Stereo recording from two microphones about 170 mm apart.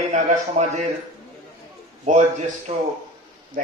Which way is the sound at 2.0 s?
45° right (ahead or behind).